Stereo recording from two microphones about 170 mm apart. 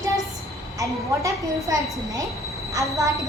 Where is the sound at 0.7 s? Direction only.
20° right (ahead or behind).